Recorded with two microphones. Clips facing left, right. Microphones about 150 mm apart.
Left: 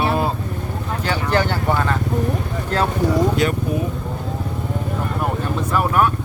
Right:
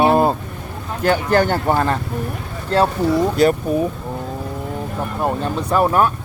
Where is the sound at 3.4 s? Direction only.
35° right (ahead or behind).